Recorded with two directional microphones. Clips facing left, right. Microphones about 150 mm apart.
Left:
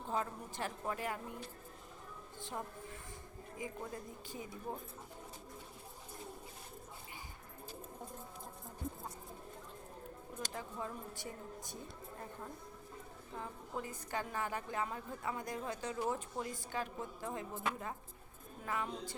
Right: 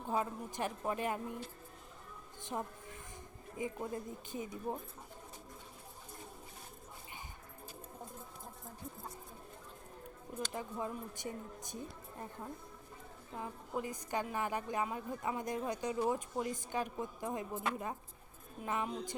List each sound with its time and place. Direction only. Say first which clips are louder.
0.1 s speech: right 3 dB; 15° right (ahead or behind)
3.6 s speech: right 5 dB; 20° right (ahead or behind)
10.5 s speech: right 3 dB; 20° right (ahead or behind)
13.3 s a woman's voice: right 3 dB; 15° right (ahead or behind)